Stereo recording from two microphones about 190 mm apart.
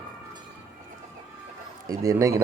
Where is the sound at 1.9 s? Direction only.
15° right (ahead or behind).